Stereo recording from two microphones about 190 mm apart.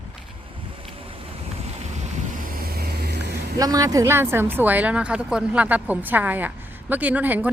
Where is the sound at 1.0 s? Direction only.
30° right (ahead or behind); by 3.3 s 55° right (ahead or behind).